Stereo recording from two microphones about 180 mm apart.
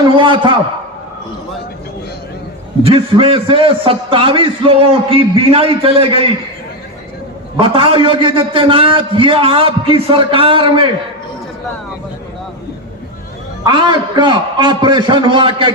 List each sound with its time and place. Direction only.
0.2 s a man's voice: 25° right (ahead or behind)
2.8 s a man's voice: 30° right (ahead or behind)
7.6 s a man's voice: 30° right (ahead or behind)
13.7 s a man's voice: 25° right (ahead or behind)